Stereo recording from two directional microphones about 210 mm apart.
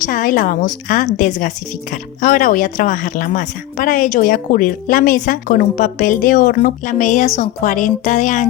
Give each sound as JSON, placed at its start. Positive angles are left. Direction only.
{"t": 0.0, "sound": "a woman's voice", "side_deg": 40}